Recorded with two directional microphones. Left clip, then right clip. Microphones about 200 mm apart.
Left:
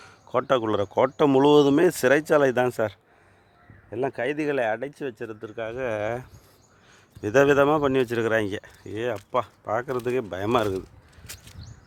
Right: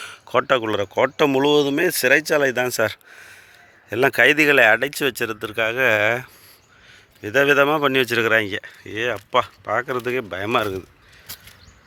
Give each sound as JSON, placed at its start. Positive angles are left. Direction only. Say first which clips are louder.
{"t": 0.0, "sound": "speech", "louder": "right 6 dB", "side_deg": 5}
{"t": 2.7, "sound": "speech", "louder": "right 6 dB", "side_deg": 5}
{"t": 7.2, "sound": "speech", "louder": "right 2 dB", "side_deg": 25}